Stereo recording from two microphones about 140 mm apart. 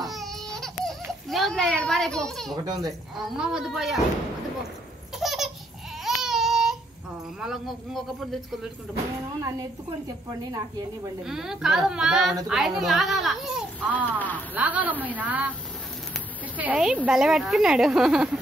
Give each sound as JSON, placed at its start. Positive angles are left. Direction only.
{"t": 0.0, "sound": "baby cry", "side_deg": 0}
{"t": 2.6, "sound": "speech", "side_deg": -25}
{"t": 3.2, "sound": "a woman's voice", "side_deg": -5}
{"t": 5.2, "sound": "baby laughter", "side_deg": 0}
{"t": 6.0, "sound": "baby cry", "side_deg": 0}
{"t": 7.3, "sound": "a woman's voice", "side_deg": 0}
{"t": 11.2, "sound": "a woman's voice", "side_deg": -5}
{"t": 13.9, "sound": "speech", "side_deg": 10}
{"t": 14.5, "sound": "a woman's voice", "side_deg": -10}
{"t": 16.5, "sound": "a woman's voice", "side_deg": -10}